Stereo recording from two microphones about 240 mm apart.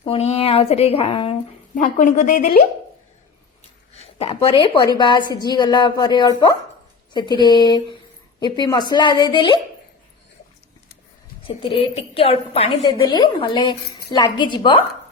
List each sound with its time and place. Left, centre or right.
0.0 s a woman's voice: left
3.9 s a sound: left
4.4 s a woman's voice: left
11.4 s a woman's voice: left